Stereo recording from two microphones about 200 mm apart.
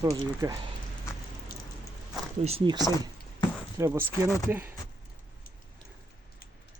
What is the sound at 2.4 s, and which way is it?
Speech, 30° right (ahead or behind).